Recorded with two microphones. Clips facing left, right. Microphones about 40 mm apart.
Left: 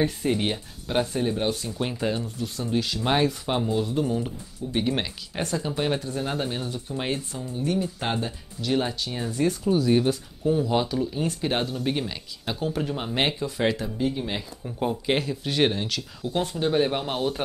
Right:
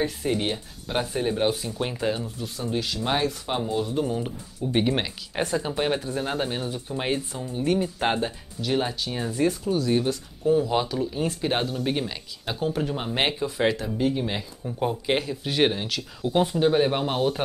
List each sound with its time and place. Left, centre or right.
0.0 s speech: centre
1.1 s speech: centre
4.6 s speech: right
4.9 s speech: centre
7.5 s speech: right
8.5 s speech: centre
9.7 s speech: centre
14.2 s speech: centre